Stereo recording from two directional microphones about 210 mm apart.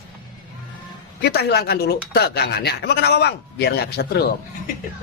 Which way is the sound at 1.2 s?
50° left (ahead or behind).